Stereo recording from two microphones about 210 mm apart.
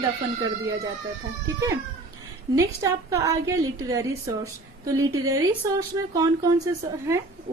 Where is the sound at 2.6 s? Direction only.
15° right (ahead or behind).